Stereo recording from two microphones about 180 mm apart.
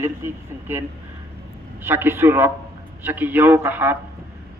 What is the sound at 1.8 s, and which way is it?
A man's voice, 10° right (ahead or behind).